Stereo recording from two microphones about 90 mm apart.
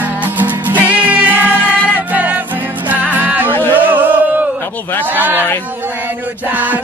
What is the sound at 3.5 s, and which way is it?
Music, 25° left (ahead or behind).